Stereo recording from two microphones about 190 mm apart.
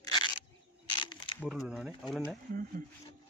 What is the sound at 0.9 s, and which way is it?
Crumpling, 25° left (ahead or behind).